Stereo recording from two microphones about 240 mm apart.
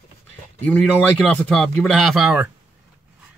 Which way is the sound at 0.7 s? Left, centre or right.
Centre.